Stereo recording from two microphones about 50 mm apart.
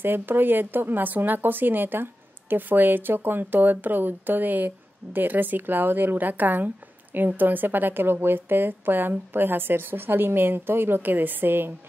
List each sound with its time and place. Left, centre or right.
0.0 s speech: right